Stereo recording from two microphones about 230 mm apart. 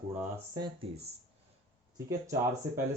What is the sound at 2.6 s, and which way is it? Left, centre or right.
Speech, centre.